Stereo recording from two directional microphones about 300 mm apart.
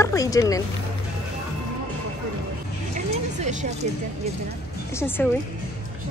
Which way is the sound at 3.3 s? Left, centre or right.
Right.